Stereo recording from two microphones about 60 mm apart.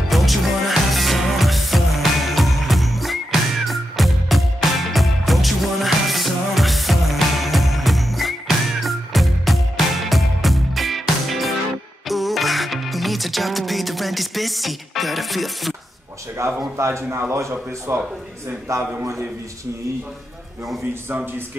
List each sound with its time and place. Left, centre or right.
0.1 s music: centre
16.3 s speech: right
18.7 s a man's voice: right